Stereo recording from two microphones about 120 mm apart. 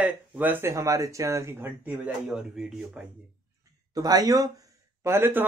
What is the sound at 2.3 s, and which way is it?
Speech, 5° right (ahead or behind).